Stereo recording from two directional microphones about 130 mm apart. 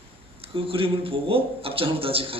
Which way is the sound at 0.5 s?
45° right (ahead or behind).